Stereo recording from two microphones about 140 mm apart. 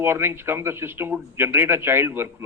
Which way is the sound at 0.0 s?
15° right (ahead or behind).